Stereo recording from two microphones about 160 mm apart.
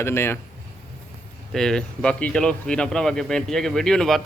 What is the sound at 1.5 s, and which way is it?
Speech, 5° left (ahead or behind).